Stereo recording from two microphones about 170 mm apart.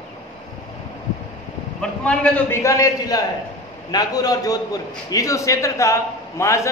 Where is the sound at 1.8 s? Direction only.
5° left (ahead or behind).